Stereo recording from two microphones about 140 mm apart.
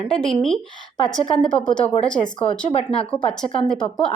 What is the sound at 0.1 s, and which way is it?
A woman's voice, 5° left (ahead or behind).